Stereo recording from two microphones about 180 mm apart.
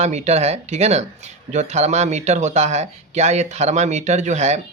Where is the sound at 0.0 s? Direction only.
40° right (ahead or behind).